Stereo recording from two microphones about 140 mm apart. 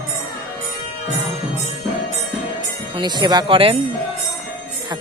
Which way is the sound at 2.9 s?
30° right (ahead or behind).